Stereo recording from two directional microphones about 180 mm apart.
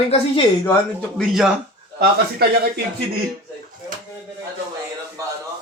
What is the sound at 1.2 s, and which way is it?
Speech, centre (ahead or behind).